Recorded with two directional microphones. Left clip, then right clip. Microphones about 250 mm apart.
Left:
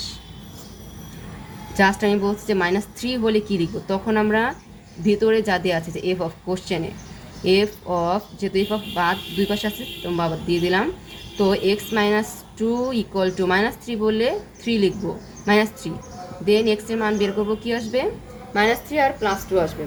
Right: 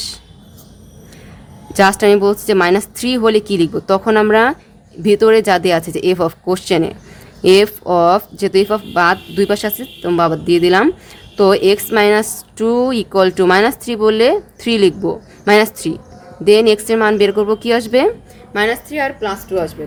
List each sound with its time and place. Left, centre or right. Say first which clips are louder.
1.7 s speech: right 8 dB; right
18.5 s a woman's voice: right 3 dB; right